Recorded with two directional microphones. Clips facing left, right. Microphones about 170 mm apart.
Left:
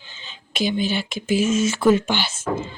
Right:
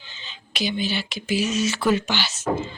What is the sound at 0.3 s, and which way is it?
Speech, 50° left (ahead or behind).